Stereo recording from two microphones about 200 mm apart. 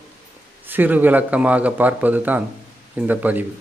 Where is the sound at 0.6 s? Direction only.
10° right (ahead or behind).